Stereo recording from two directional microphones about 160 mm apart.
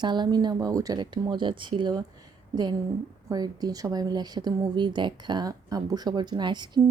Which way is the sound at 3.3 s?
25° right (ahead or behind).